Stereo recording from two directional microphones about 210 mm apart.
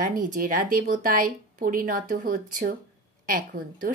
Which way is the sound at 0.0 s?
40° right (ahead or behind).